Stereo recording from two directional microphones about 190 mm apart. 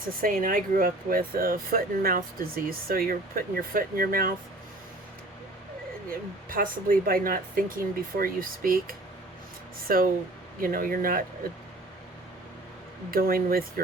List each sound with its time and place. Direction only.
0.2 s speech: 45° right (ahead or behind)
6.1 s speech: 50° right (ahead or behind)
13.1 s speech: 50° right (ahead or behind)